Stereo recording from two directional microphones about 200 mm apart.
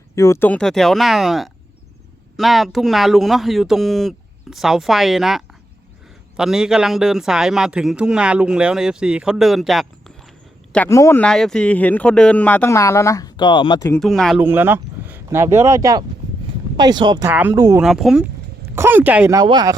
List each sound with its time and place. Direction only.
0.2 s speech: 15° left (ahead or behind)
10.7 s speech: 10° left (ahead or behind)
14.0 s speech: centre (ahead or behind); by 17.7 s 15° right (ahead or behind)
17.7 s speech: centre (ahead or behind)
19.4 s speech: 20° right (ahead or behind)